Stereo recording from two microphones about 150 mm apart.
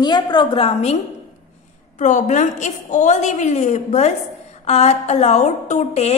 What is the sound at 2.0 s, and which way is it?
A woman's voice, 55° left (ahead or behind).